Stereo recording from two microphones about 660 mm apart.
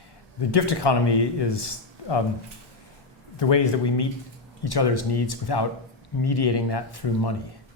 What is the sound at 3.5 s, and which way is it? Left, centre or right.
Speech, left.